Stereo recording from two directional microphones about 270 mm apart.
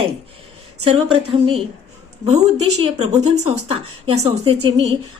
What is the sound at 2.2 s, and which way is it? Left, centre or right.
A woman's voice, right.